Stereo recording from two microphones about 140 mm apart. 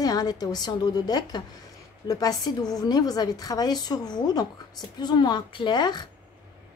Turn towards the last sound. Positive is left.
turn(degrees=30)  # may be behind; listen again after turning